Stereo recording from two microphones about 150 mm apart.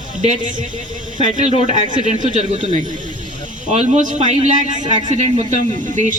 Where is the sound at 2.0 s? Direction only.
50° right (ahead or behind).